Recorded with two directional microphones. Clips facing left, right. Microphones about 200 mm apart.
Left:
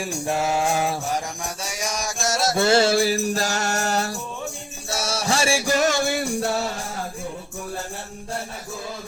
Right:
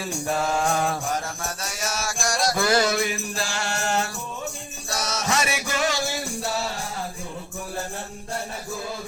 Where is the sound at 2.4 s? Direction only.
25° left (ahead or behind); by 6.5 s 60° left (ahead or behind).